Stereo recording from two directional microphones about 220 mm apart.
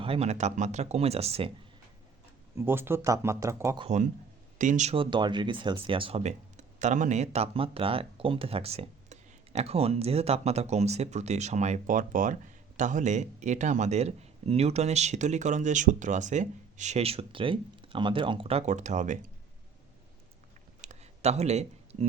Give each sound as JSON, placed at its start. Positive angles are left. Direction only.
{"t": 0.0, "sound": "speech", "side_deg": -25}
{"t": 2.6, "sound": "speech", "side_deg": -10}
{"t": 3.8, "sound": "speech", "side_deg": -35}
{"t": 20.8, "sound": "a sound", "side_deg": -30}